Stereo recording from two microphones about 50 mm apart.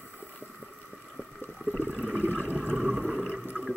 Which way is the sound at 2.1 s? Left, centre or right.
Left.